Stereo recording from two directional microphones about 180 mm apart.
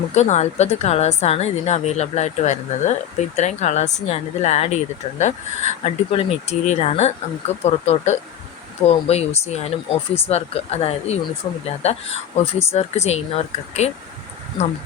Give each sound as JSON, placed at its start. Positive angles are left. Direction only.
{"t": 0.1, "sound": "a woman's voice", "side_deg": 40}